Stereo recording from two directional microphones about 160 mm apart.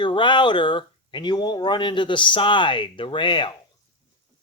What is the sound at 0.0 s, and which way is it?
Speech, 30° left (ahead or behind).